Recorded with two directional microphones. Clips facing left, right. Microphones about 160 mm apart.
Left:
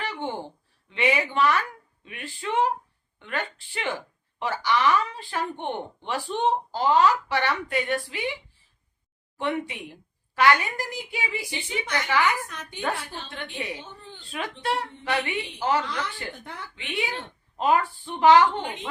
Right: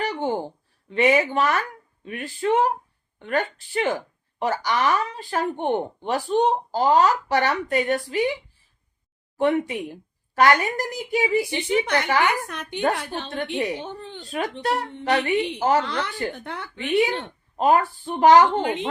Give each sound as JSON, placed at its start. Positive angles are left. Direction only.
{"t": 0.0, "sound": "a sound", "side_deg": -40}
{"t": 0.9, "sound": "a woman's voice", "side_deg": -45}
{"t": 9.4, "sound": "a woman's voice", "side_deg": -40}
{"t": 11.5, "sound": "a woman's voice", "side_deg": -60}
{"t": 14.6, "sound": "a woman's voice", "side_deg": -40}
{"t": 16.4, "sound": "a woman's voice", "side_deg": -65}
{"t": 17.6, "sound": "a woman's voice", "side_deg": -45}
{"t": 18.6, "sound": "a woman's voice", "side_deg": -65}